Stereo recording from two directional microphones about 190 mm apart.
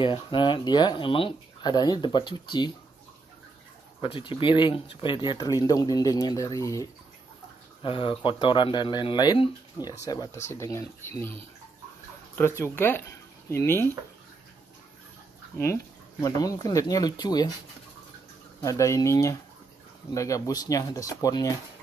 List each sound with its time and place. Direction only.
0.0 s speech: 25° left (ahead or behind)
4.0 s speech: 25° left (ahead or behind)
7.8 s speech: 25° left (ahead or behind); by 11.3 s 10° left (ahead or behind)
12.4 s speech: 10° left (ahead or behind)
15.5 s speech: 15° left (ahead or behind)
18.6 s speech: 15° left (ahead or behind)